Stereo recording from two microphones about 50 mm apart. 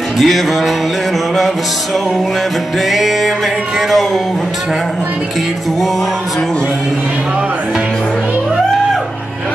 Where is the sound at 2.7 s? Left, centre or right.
Centre.